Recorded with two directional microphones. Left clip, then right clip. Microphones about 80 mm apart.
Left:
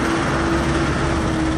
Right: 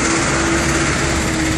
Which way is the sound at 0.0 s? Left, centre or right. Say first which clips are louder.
Right 3 dB; right.